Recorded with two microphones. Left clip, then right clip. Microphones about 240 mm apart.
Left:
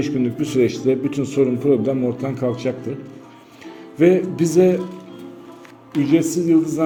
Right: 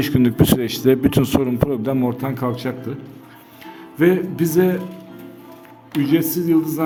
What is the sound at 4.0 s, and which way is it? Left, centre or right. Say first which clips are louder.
Speech: left 2 dB; centre.